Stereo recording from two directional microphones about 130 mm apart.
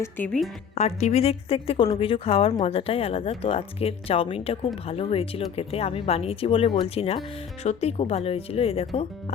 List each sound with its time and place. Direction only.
0.3 s speech: 5° left (ahead or behind)
0.8 s speech: 55° left (ahead or behind)